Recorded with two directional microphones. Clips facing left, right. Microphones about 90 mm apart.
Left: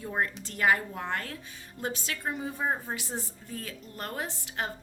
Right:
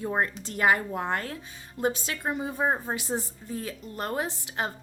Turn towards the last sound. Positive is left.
turn(degrees=-20)  # may be behind; listen again after turning